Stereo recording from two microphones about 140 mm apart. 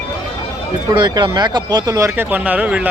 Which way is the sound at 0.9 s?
35° right (ahead or behind).